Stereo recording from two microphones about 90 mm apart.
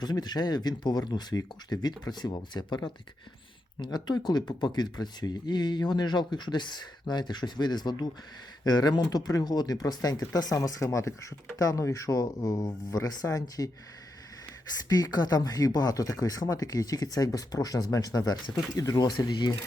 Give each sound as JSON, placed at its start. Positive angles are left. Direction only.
{"t": 0.0, "sound": "speech", "side_deg": 50}
{"t": 3.9, "sound": "speech", "side_deg": 50}
{"t": 14.8, "sound": "speech", "side_deg": 45}